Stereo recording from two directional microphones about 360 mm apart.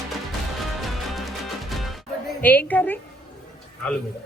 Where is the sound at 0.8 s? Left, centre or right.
Centre.